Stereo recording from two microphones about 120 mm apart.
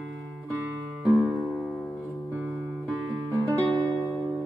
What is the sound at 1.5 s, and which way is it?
Music, centre (ahead or behind).